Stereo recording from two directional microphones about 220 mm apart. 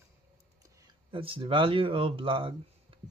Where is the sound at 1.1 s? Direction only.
25° right (ahead or behind).